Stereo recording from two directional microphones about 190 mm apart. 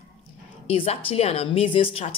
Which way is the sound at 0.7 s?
30° left (ahead or behind).